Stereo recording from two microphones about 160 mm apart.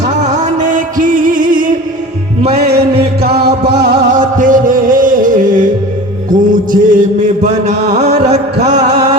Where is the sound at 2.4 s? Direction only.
40° right (ahead or behind).